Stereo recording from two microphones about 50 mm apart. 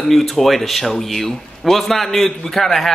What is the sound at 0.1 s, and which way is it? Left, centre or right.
Speech, centre.